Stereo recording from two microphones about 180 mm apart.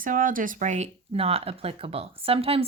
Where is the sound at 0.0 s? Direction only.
50° right (ahead or behind).